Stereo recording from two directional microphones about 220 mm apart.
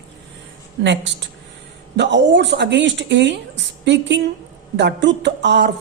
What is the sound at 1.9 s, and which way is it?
A woman's voice, 55° right (ahead or behind).